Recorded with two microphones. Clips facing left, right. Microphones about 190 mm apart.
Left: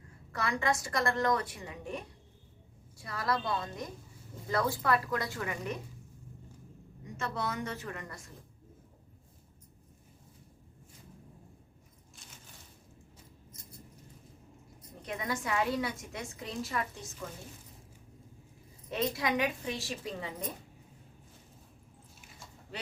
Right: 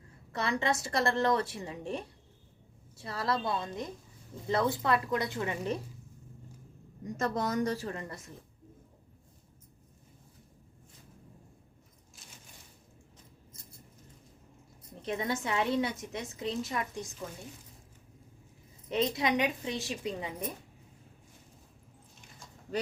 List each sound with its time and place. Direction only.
0.3 s a woman's voice: 25° right (ahead or behind)
7.0 s a woman's voice: 40° right (ahead or behind)
14.8 s a woman's voice: 25° right (ahead or behind)
18.9 s a woman's voice: 20° right (ahead or behind)